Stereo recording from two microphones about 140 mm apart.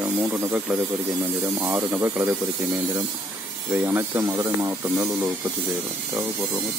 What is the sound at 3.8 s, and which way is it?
Speech, 20° right (ahead or behind).